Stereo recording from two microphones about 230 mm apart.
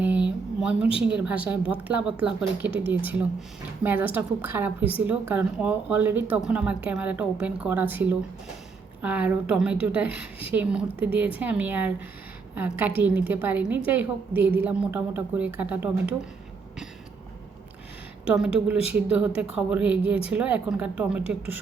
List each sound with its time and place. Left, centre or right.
0.0 s a sound: centre
0.9 s a woman's voice: centre
18.3 s a woman's voice: centre